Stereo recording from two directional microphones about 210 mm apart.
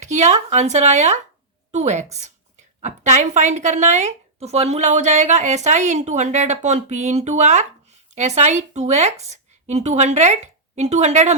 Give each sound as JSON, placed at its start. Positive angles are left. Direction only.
{"t": 0.0, "sound": "a woman's voice", "side_deg": -35}